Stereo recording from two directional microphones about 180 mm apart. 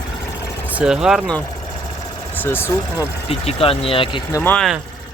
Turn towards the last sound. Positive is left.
turn(degrees=10)  # may be behind; listen again after turning